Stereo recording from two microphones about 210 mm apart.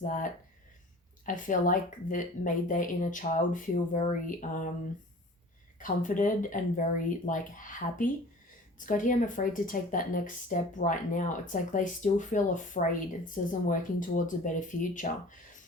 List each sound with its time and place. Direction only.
0.0 s speech: 35° left (ahead or behind)
5.8 s speech: 40° left (ahead or behind)